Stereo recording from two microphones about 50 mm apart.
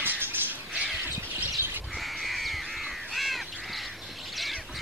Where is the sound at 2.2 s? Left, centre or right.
Centre.